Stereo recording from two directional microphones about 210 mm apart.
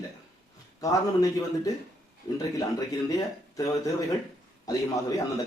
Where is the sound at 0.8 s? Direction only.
15° left (ahead or behind).